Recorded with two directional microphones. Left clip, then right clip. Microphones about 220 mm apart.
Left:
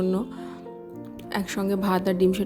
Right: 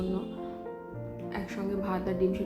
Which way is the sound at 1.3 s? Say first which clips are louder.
Left 8 dB; 50° left (ahead or behind).